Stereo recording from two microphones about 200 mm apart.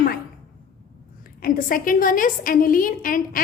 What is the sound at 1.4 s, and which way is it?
A woman's voice, 45° left (ahead or behind).